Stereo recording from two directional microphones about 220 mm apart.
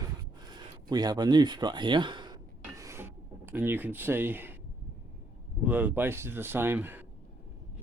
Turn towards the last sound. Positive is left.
turn(degrees=-10)  # may be behind; listen again after turning